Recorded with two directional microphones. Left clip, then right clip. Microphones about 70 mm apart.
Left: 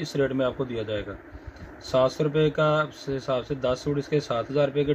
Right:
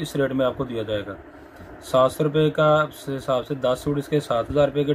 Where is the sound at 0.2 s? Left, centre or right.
Left.